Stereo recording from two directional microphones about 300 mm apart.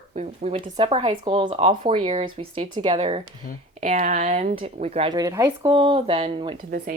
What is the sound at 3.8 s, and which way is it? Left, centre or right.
Speech, right.